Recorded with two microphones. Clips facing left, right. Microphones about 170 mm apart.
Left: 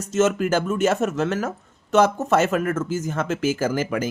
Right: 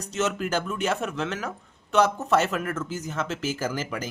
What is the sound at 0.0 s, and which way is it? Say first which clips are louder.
Speech: left 7 dB; 50° left (ahead or behind).